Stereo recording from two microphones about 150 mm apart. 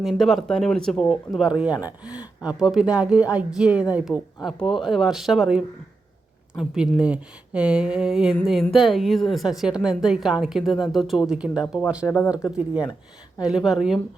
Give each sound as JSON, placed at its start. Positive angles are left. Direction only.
{"t": 0.0, "sound": "a woman's voice", "side_deg": 0}
{"t": 12.0, "sound": "speech", "side_deg": 20}
{"t": 12.5, "sound": "a woman's voice", "side_deg": -5}